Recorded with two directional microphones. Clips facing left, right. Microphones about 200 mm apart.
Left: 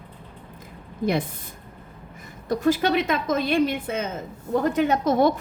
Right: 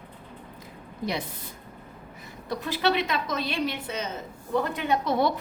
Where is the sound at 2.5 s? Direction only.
45° left (ahead or behind).